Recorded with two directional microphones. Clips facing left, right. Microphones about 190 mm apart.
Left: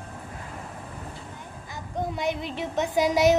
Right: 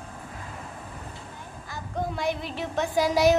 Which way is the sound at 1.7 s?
20° left (ahead or behind).